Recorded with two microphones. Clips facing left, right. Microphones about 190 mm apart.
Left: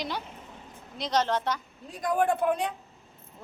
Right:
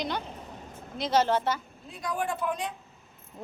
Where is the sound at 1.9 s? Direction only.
45° left (ahead or behind).